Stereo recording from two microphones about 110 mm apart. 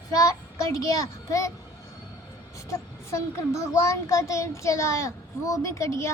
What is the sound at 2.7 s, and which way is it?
A child's voice, 25° left (ahead or behind).